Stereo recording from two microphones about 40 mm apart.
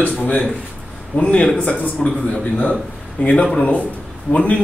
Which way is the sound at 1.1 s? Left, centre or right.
Left.